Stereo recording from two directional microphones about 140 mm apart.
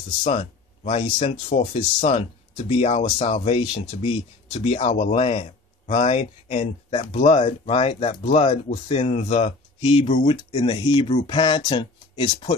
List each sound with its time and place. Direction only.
0.2 s speech: 55° left (ahead or behind)
1.5 s speech: 80° left
2.0 s speech: 45° left (ahead or behind)